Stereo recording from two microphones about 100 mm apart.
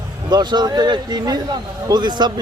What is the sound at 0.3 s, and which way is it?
A man's voice, 45° right (ahead or behind).